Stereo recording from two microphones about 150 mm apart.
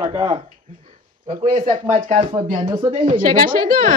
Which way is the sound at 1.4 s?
65° right (ahead or behind).